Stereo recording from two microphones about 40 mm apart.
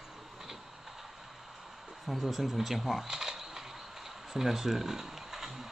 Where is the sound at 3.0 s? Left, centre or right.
Centre.